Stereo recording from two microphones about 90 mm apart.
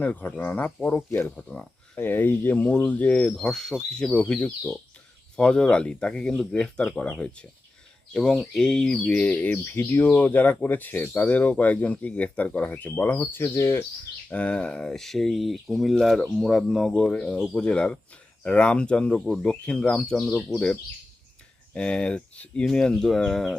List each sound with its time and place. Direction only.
0.0 s speech: 15° left (ahead or behind)
14.3 s speech: 15° left (ahead or behind)